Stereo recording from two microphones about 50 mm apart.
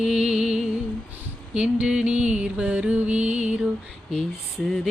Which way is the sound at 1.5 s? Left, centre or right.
Right.